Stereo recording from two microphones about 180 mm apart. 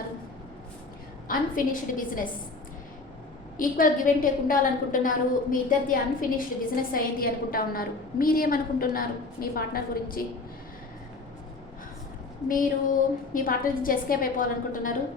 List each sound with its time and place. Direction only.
1.3 s a woman's voice: 50° left (ahead or behind)
3.6 s a woman's voice: 50° left (ahead or behind)
12.5 s a woman's voice: 50° left (ahead or behind)